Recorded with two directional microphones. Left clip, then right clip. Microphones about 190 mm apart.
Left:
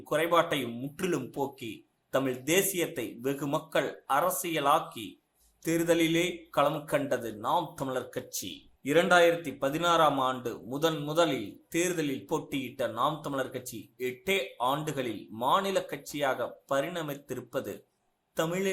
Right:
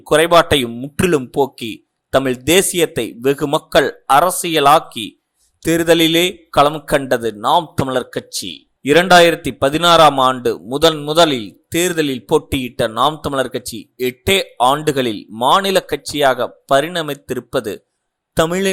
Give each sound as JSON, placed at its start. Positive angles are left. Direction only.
{"t": 0.0, "sound": "speech", "side_deg": -50}